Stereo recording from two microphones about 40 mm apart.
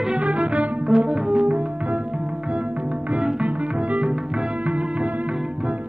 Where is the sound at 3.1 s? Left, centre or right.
Right.